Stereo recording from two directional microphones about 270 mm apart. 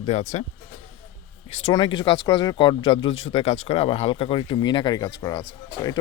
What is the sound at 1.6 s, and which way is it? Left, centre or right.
Speech, centre.